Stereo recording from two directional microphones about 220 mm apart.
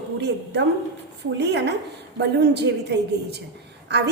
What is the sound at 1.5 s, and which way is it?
A woman's voice, 50° right (ahead or behind).